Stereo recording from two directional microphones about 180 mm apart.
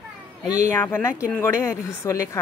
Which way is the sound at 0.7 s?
10° left (ahead or behind).